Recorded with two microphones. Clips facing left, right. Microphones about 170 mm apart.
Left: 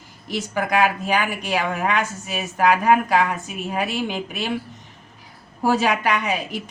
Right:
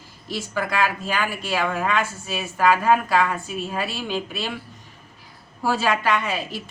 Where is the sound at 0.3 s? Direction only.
15° left (ahead or behind).